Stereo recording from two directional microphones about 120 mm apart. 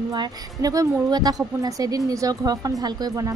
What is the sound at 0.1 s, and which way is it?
A woman's voice, 35° right (ahead or behind).